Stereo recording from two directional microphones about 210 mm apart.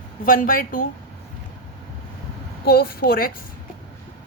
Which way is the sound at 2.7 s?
45° left (ahead or behind).